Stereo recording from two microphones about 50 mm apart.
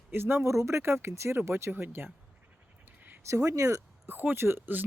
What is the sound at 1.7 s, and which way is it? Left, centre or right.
Speech, right.